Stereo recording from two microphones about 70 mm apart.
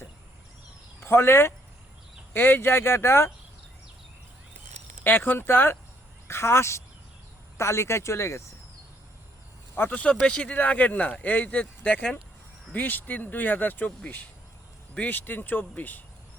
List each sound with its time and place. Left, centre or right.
1.0 s speech: left
5.0 s speech: left
9.7 s speech: left